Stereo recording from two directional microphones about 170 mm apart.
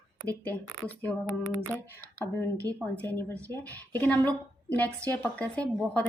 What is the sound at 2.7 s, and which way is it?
Speech, 20° right (ahead or behind).